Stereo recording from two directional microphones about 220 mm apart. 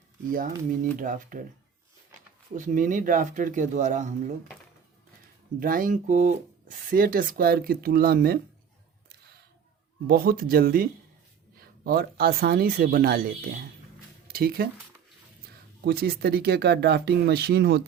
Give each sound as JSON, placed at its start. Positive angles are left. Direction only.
{"t": 0.3, "sound": "speech", "side_deg": -40}
{"t": 2.6, "sound": "speech", "side_deg": -35}
{"t": 5.5, "sound": "speech", "side_deg": -40}
{"t": 10.1, "sound": "speech", "side_deg": -40}
{"t": 15.9, "sound": "speech", "side_deg": -45}